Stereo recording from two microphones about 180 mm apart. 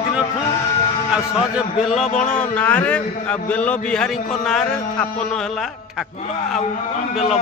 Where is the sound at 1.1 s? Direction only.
5° right (ahead or behind).